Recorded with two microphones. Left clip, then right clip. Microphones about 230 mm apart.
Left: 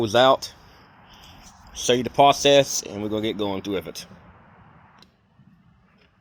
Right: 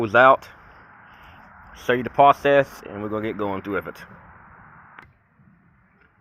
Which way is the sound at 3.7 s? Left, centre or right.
Centre.